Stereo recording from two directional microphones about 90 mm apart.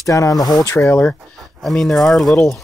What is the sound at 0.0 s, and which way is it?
Speech, 35° left (ahead or behind).